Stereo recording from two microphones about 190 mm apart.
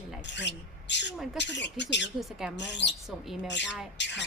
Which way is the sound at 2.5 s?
65° left (ahead or behind).